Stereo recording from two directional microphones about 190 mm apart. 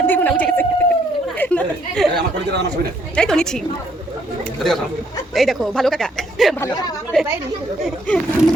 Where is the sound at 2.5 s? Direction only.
60° right (ahead or behind).